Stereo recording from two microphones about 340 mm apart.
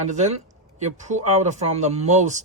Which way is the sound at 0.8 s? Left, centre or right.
Right.